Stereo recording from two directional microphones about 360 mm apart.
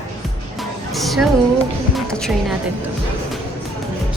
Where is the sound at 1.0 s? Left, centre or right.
Centre.